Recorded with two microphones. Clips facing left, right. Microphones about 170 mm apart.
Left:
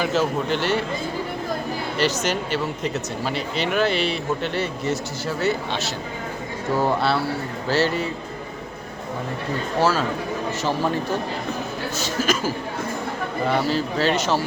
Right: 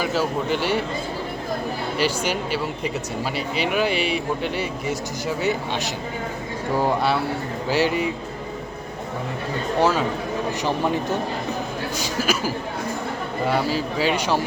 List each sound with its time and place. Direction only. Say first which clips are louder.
0.0 s speech: left 1 dB; 10° right (ahead or behind)
2.0 s speech: left 1 dB; 10° right (ahead or behind)
10.6 s speech: even; 15° right (ahead or behind)
13.5 s speech: left 1 dB; 10° right (ahead or behind)